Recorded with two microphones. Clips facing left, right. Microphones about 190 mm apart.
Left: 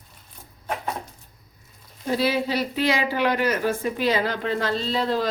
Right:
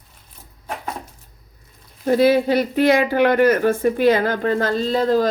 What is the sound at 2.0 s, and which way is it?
Speech, 50° right (ahead or behind).